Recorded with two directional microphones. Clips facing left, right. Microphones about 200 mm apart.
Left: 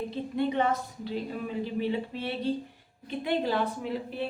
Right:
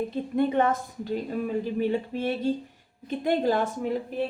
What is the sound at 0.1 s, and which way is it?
A woman's voice, 50° right (ahead or behind).